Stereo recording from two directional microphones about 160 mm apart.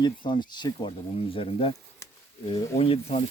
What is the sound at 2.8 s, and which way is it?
Speech, 40° left (ahead or behind).